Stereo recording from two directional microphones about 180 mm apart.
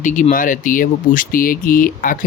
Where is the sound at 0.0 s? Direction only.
45° left (ahead or behind).